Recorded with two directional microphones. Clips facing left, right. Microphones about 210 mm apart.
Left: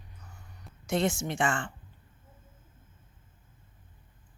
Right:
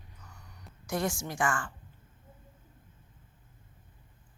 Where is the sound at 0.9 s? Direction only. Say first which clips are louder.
Left 4 dB; 25° left (ahead or behind).